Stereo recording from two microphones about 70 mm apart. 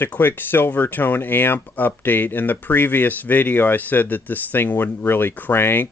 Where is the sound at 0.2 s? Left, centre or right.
Left.